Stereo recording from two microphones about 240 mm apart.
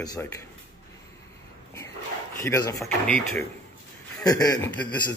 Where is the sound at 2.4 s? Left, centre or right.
Centre.